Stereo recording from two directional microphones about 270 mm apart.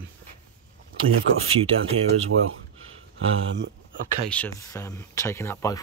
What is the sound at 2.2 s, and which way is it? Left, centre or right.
Speech, right.